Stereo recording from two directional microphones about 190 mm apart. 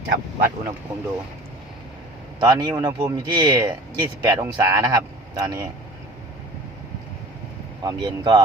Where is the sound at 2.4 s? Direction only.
20° right (ahead or behind).